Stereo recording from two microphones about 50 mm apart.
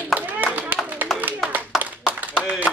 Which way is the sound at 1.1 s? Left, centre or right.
Centre.